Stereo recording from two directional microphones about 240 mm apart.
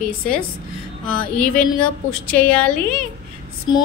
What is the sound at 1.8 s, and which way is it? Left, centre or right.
Speech, centre.